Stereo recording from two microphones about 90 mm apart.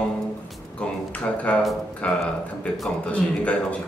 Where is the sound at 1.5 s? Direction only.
10° left (ahead or behind).